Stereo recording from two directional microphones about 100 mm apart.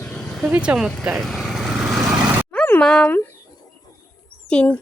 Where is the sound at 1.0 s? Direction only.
5° right (ahead or behind).